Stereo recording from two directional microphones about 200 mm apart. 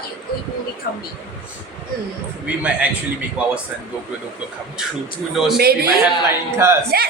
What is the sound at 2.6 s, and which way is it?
Speech, 5° right (ahead or behind).